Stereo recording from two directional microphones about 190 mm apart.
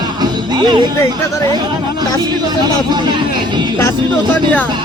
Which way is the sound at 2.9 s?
25° right (ahead or behind).